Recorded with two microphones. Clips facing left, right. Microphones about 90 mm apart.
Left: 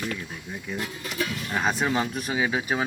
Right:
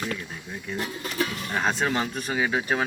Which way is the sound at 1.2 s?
35° right (ahead or behind).